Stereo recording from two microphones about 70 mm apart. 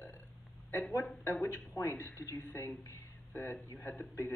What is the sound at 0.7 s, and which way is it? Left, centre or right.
A man's voice, left.